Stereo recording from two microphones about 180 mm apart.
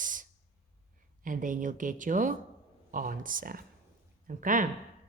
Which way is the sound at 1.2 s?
45° right (ahead or behind).